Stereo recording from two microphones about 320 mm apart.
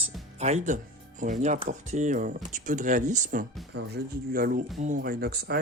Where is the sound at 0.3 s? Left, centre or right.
Right.